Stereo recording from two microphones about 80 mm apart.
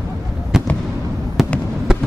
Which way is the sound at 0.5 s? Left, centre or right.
Centre.